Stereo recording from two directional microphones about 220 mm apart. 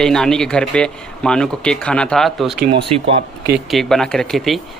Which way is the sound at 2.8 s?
25° right (ahead or behind).